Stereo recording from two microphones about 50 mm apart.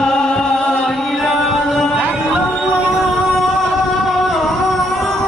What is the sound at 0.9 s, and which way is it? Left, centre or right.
Chant, centre.